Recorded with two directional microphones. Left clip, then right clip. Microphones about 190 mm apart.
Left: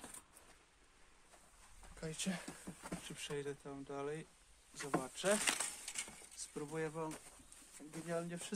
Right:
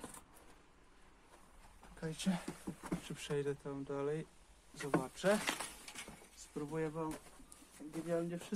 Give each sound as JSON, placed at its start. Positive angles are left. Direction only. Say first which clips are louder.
{"t": 2.0, "sound": "speech", "louder": "right 2 dB", "side_deg": 0}
{"t": 5.4, "sound": "speech", "louder": "left 1 dB", "side_deg": 30}